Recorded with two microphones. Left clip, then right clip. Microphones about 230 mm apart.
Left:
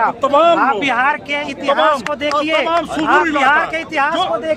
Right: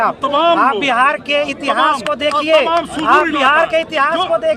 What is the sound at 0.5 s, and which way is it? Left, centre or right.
Speech, right.